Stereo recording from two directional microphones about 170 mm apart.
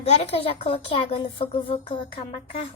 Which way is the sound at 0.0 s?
40° left (ahead or behind).